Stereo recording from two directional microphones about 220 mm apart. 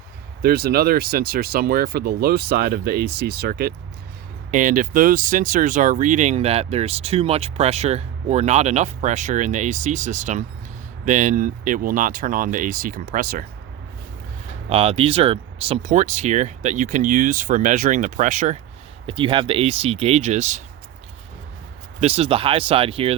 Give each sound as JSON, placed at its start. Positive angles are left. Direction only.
{"t": 0.4, "sound": "speech", "side_deg": -45}
{"t": 14.7, "sound": "speech", "side_deg": -25}
{"t": 19.0, "sound": "speech", "side_deg": -20}
{"t": 22.0, "sound": "speech", "side_deg": -25}